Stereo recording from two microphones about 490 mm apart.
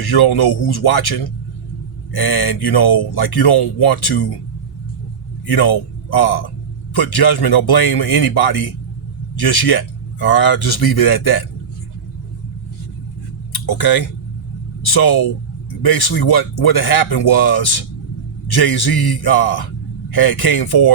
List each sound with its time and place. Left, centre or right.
0.0 s a man's voice: left
5.5 s a man's voice: left
13.5 s a sound: left
14.8 s a man's voice: left